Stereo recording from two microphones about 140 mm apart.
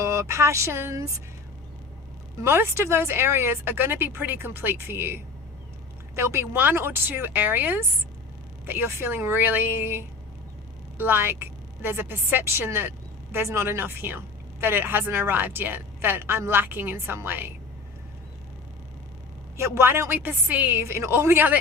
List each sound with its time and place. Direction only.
0.0 s speech: 20° right (ahead or behind)
2.4 s a woman's voice: 15° right (ahead or behind)
19.5 s a woman's voice: 20° right (ahead or behind)